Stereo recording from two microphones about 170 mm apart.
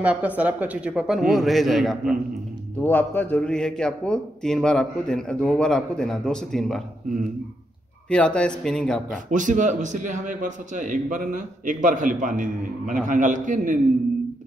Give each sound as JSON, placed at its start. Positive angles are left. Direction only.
{"t": 0.0, "sound": "a man's voice", "side_deg": -5}
{"t": 2.8, "sound": "a man's voice", "side_deg": 10}
{"t": 8.1, "sound": "a man's voice", "side_deg": 5}
{"t": 9.3, "sound": "a man's voice", "side_deg": -50}